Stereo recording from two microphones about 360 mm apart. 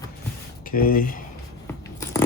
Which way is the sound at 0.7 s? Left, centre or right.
Left.